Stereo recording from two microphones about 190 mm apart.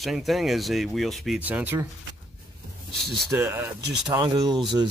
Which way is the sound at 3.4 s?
10° right (ahead or behind).